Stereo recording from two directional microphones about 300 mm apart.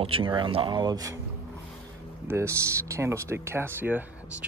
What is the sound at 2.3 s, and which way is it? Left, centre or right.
Speech, centre.